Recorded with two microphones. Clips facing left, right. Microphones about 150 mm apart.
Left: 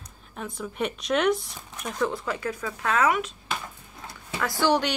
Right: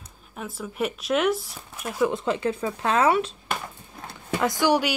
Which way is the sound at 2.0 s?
25° right (ahead or behind).